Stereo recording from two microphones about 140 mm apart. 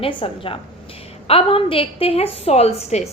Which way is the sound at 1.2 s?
45° left (ahead or behind).